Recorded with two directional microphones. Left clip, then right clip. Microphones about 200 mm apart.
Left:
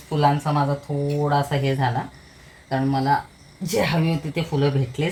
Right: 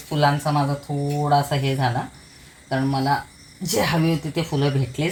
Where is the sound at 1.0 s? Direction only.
25° right (ahead or behind).